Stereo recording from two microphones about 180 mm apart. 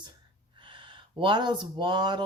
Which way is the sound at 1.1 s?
25° right (ahead or behind).